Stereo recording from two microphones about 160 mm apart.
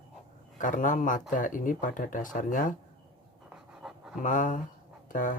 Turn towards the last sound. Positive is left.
turn(degrees=55)  # may be behind; listen again after turning